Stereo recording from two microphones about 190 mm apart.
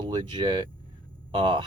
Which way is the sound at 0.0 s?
25° right (ahead or behind).